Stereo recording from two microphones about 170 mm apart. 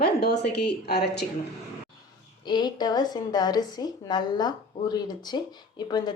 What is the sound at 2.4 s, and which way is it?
A woman's voice, 25° left (ahead or behind).